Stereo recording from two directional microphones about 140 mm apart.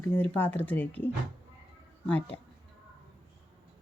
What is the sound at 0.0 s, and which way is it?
Speech, 10° left (ahead or behind).